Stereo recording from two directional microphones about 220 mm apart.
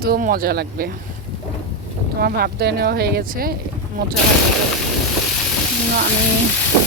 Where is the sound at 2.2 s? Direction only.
45° right (ahead or behind).